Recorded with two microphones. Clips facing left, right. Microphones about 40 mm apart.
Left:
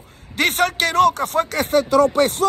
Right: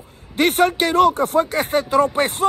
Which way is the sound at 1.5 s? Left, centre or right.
Right.